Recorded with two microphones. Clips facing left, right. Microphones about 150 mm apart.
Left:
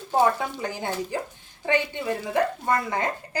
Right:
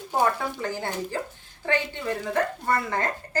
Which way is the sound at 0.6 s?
15° left (ahead or behind).